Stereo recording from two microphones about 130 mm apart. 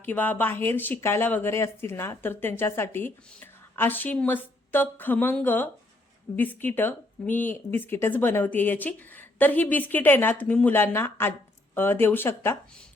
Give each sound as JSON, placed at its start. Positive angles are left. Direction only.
{"t": 0.0, "sound": "speech", "side_deg": 15}